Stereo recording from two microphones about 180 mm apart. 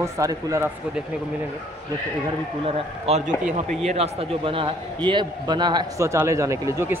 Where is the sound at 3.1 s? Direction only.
35° right (ahead or behind).